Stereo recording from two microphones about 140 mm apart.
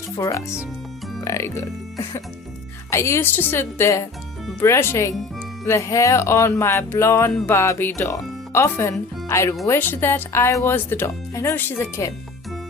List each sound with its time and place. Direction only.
0.2 s speech: 20° left (ahead or behind)
2.9 s speech: 20° left (ahead or behind)